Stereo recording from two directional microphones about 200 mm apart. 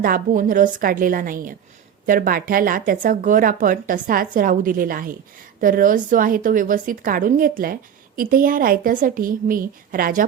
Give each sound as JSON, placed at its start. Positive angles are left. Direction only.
{"t": 0.0, "sound": "a woman's voice", "side_deg": -45}